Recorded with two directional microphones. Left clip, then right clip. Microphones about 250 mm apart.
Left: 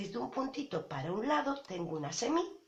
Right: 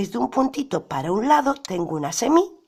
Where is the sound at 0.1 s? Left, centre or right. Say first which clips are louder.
Right 15 dB; right.